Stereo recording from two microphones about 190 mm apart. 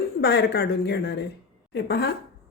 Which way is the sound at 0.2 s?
60° left (ahead or behind).